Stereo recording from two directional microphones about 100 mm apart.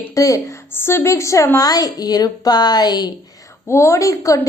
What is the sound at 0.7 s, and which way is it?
A woman's voice, 25° left (ahead or behind).